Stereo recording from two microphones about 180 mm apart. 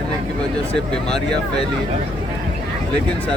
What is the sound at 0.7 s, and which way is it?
Speech, 5° left (ahead or behind).